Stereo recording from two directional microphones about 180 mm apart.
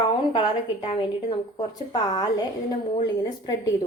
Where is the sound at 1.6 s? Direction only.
20° left (ahead or behind).